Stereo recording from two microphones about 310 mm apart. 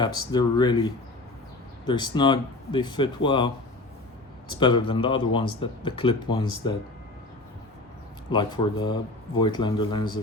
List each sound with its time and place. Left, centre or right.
0.0 s speech: centre
4.6 s speech: centre
8.3 s speech: centre